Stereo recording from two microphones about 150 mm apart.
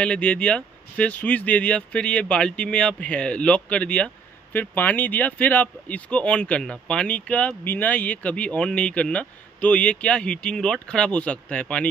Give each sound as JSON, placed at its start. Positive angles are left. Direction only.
{"t": 0.0, "sound": "speech", "side_deg": 5}